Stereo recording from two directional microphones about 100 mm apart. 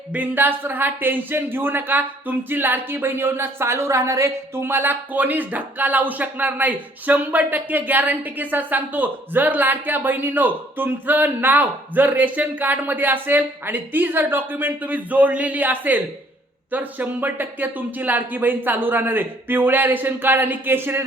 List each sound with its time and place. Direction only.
0.1 s speech: 15° right (ahead or behind)